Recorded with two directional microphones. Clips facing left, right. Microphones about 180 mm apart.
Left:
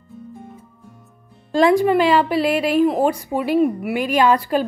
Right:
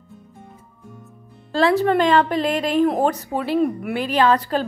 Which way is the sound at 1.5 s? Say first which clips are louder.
Left 3 dB; 15° left (ahead or behind).